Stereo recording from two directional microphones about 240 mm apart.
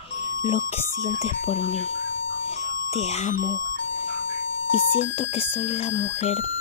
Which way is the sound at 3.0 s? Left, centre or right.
Left.